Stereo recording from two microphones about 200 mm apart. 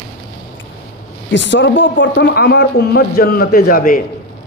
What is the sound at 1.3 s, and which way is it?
A man's voice, 65° left (ahead or behind).